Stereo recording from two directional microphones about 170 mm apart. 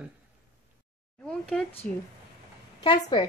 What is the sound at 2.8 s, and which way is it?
Speech, 25° left (ahead or behind).